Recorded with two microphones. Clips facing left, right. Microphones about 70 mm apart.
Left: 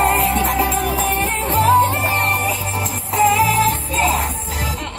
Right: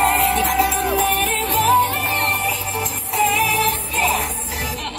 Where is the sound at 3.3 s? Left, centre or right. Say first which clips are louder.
Left 3 dB; left.